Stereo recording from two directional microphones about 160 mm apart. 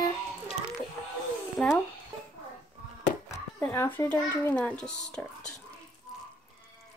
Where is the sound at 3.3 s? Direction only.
15° left (ahead or behind).